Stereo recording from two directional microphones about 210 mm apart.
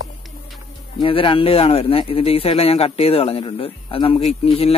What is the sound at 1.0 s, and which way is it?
Speech, 25° left (ahead or behind).